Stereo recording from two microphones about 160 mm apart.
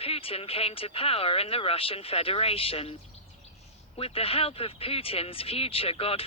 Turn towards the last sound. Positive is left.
turn(degrees=35)  # may be behind; listen again after turning